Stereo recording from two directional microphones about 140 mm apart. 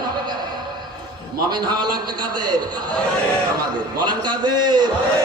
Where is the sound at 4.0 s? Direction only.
30° right (ahead or behind).